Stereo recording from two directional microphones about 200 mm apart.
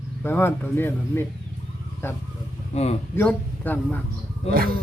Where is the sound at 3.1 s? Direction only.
10° left (ahead or behind).